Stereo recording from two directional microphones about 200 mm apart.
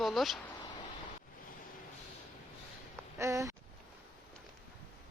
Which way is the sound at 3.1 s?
15° right (ahead or behind).